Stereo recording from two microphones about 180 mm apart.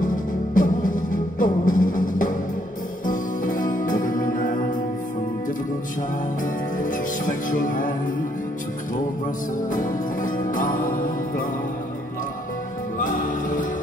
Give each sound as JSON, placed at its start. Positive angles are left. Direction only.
{"t": 0.0, "sound": "music", "side_deg": 50}
{"t": 6.4, "sound": "music", "side_deg": 45}
{"t": 9.7, "sound": "music", "side_deg": 45}
{"t": 13.0, "sound": "music", "side_deg": 45}